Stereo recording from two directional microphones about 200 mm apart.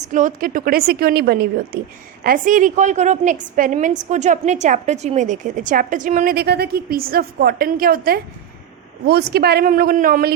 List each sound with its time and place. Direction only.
0.1 s a woman's voice: 40° right (ahead or behind)